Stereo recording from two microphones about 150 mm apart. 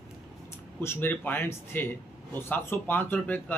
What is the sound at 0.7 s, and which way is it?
Speech, 15° left (ahead or behind).